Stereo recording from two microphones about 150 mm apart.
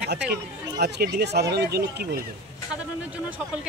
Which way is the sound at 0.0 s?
90° right.